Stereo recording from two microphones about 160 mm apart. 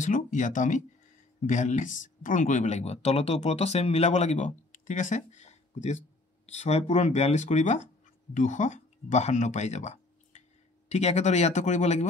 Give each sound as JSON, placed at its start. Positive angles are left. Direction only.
{"t": 0.0, "sound": "speech", "side_deg": 55}